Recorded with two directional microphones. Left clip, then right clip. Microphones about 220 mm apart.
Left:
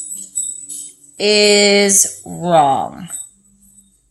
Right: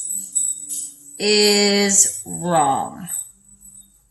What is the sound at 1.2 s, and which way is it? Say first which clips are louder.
Speech: left 5 dB; 45° left (ahead or behind).